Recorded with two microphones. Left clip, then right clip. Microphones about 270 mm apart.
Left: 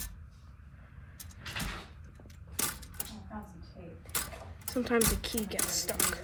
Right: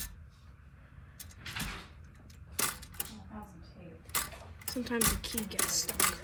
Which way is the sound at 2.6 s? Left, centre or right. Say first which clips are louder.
Right 2 dB; centre.